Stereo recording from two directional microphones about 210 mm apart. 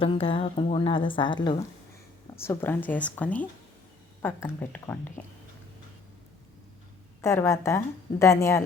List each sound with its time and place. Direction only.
0.0 s a woman's voice: 25° left (ahead or behind)
2.3 s speech: 10° left (ahead or behind)
7.2 s speech: 10° left (ahead or behind)